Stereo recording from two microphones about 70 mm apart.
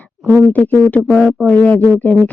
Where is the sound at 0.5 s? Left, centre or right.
Left.